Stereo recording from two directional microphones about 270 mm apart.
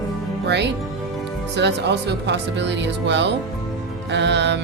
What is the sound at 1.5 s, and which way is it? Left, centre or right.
A man's voice, right.